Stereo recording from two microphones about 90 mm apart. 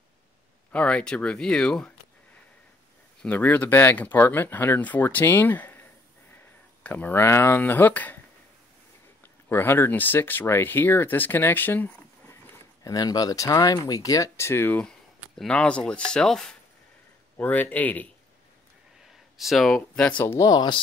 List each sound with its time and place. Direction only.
0.7 s speech: 15° left (ahead or behind)
3.2 s speech: 20° left (ahead or behind)
9.2 s speech: 25° left (ahead or behind)
12.8 s speech: 45° left (ahead or behind); by 14.8 s 25° left (ahead or behind)
14.8 s speech: 10° left (ahead or behind)
17.4 s speech: 20° left (ahead or behind)
19.3 s speech: centre (ahead or behind)
20.0 s speech: 15° left (ahead or behind)
20.3 s speech: 40° left (ahead or behind)